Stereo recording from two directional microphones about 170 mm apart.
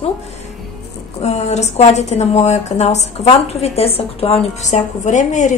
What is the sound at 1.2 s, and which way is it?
A woman's voice, 40° left (ahead or behind).